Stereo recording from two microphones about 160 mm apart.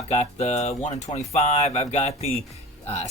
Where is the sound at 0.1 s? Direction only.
45° left (ahead or behind).